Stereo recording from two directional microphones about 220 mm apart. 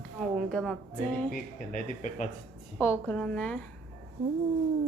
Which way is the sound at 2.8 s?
10° left (ahead or behind).